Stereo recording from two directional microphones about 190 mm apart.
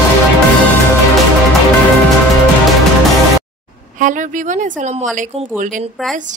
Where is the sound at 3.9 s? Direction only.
40° right (ahead or behind).